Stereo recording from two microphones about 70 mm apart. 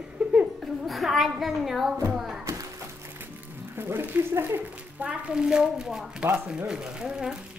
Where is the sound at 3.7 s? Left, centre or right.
Right; by 7.4 s centre.